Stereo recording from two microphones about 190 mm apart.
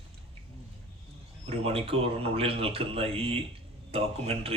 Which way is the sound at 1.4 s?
30° right (ahead or behind).